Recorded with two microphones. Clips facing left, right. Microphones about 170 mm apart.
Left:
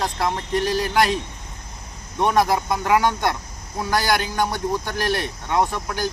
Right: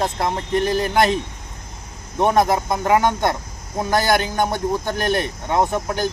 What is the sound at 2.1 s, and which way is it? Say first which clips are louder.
Speech: right 2 dB; 20° right (ahead or behind).